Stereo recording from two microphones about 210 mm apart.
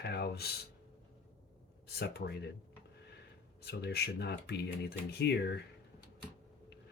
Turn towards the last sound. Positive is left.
turn(degrees=50)  # may be behind; listen again after turning